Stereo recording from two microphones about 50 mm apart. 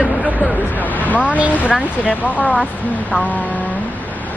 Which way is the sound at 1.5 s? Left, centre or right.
Left.